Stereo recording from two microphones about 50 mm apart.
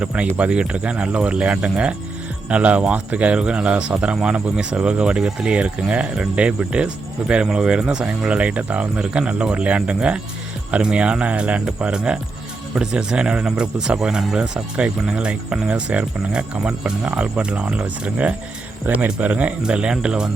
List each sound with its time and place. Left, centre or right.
0.0 s speech: right